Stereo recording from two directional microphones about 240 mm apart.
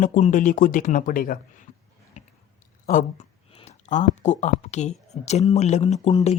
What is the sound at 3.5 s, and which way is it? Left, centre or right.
Speech, left.